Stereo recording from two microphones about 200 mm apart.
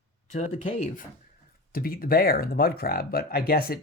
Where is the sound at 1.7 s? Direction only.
45° left (ahead or behind).